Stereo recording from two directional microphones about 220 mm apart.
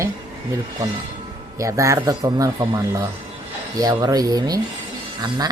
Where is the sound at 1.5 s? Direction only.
15° right (ahead or behind).